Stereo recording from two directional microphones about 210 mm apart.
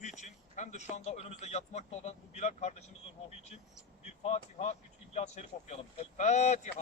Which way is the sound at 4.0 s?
30° left (ahead or behind).